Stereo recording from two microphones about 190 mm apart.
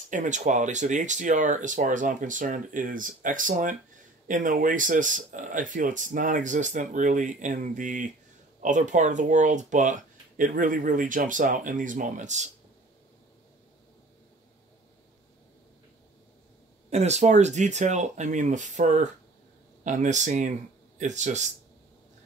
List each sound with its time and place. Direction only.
0.1 s speech: 40° right (ahead or behind)
16.9 s speech: 35° right (ahead or behind)